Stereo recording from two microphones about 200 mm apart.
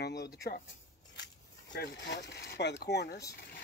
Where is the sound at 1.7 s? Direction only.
55° left (ahead or behind).